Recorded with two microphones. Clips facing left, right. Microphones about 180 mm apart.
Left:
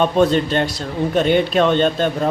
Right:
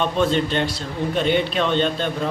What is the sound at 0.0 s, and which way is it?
A man's voice, 40° left (ahead or behind).